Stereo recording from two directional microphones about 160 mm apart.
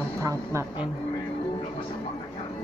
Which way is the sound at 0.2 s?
20° right (ahead or behind).